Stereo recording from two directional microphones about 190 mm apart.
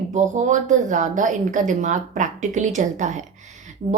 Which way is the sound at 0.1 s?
40° right (ahead or behind).